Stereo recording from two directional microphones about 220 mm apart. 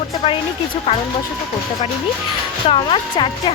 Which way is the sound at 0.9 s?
25° left (ahead or behind).